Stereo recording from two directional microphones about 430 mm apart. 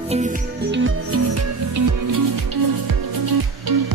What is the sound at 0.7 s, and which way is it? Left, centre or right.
Music, right.